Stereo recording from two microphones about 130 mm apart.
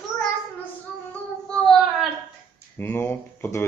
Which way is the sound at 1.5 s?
5° left (ahead or behind).